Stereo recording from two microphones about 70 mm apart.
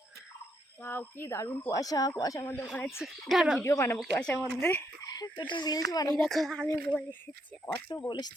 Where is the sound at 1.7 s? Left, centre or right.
Left.